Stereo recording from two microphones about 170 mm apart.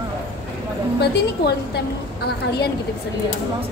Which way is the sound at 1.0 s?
75° left (ahead or behind).